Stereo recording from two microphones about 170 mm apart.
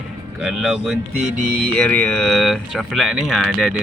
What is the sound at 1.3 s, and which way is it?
Music, 50° right (ahead or behind).